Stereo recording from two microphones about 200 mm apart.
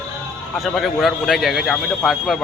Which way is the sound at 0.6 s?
Centre (ahead or behind).